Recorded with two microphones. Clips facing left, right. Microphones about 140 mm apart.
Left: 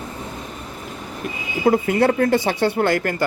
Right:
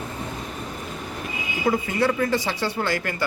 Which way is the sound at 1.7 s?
55° left (ahead or behind).